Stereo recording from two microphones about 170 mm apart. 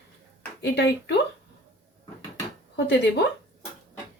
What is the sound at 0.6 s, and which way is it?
Speech, 75° left (ahead or behind).